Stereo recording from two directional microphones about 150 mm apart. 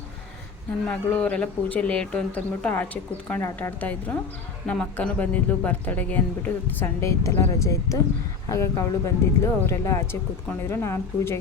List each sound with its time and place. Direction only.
0.9 s speech: 10° left (ahead or behind)